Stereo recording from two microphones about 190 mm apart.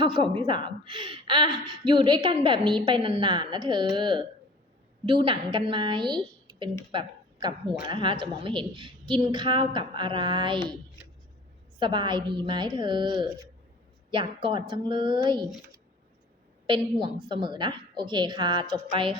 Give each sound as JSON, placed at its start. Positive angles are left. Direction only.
{"t": 0.0, "sound": "speech", "side_deg": -25}
{"t": 11.8, "sound": "speech", "side_deg": -25}
{"t": 16.6, "sound": "speech", "side_deg": -25}